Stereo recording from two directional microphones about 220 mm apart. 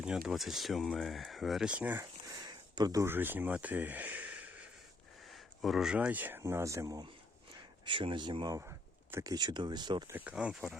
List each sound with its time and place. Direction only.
0.0 s speech: centre (ahead or behind); by 10.2 s 20° right (ahead or behind)
10.2 s speech: 5° right (ahead or behind)